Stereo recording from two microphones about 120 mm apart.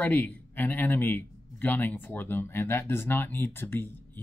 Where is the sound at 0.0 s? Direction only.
15° left (ahead or behind).